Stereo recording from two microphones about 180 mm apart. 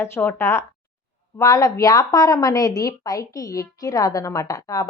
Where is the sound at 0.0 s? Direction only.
10° left (ahead or behind).